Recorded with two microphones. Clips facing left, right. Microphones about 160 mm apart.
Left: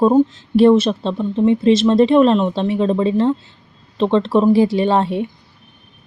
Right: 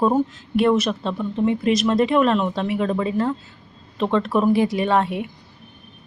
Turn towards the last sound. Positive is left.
turn(degrees=30)  # may be behind; listen again after turning